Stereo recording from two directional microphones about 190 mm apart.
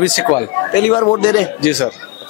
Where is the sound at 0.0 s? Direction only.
5° left (ahead or behind).